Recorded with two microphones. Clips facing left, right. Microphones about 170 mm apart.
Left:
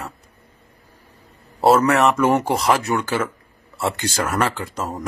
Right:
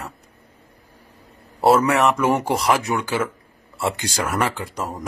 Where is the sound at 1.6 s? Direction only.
10° right (ahead or behind).